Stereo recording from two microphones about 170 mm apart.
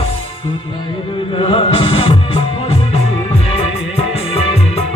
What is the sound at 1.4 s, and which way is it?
Music, 30° left (ahead or behind).